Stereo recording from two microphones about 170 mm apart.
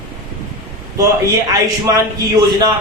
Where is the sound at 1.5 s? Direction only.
20° right (ahead or behind).